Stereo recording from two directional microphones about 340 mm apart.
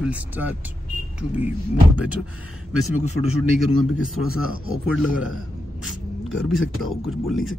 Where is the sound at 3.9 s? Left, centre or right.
Left.